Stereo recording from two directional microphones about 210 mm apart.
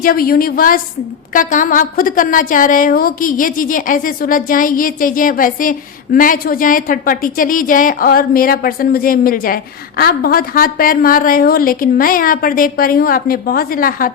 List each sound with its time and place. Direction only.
0.0 s a woman's voice: 45° left (ahead or behind)